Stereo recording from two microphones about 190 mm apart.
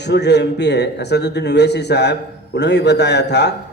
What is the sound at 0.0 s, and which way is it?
Speech, 65° left (ahead or behind).